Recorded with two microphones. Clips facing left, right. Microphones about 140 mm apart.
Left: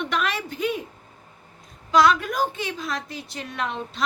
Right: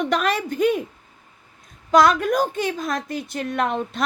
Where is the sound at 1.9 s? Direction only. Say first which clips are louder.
Right 3 dB; 45° right (ahead or behind).